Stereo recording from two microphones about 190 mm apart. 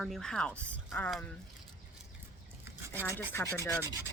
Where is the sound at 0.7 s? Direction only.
5° left (ahead or behind).